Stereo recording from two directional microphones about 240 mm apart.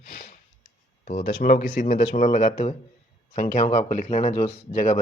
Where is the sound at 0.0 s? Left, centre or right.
Left.